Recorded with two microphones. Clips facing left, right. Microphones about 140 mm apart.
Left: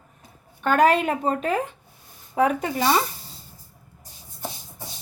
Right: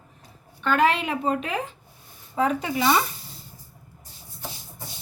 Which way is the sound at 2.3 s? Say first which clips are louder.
Left 3 dB; 60° left (ahead or behind).